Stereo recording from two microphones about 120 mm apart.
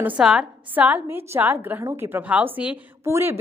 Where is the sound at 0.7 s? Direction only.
15° right (ahead or behind).